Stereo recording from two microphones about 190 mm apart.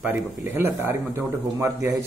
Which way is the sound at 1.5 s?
15° right (ahead or behind).